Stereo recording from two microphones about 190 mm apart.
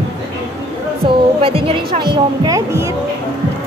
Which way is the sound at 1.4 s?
30° right (ahead or behind).